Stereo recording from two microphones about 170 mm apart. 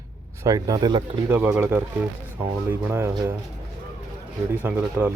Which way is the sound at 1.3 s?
10° right (ahead or behind).